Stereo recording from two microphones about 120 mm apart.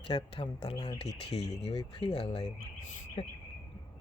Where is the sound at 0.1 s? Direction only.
50° left (ahead or behind).